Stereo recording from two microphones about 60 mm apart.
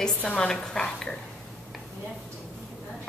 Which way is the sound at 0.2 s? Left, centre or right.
Left.